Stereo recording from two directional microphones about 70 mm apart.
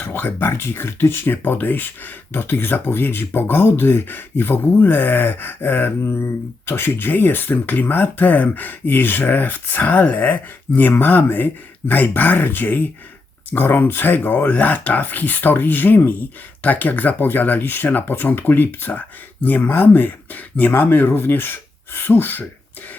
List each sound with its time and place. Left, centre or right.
0.0 s speech: left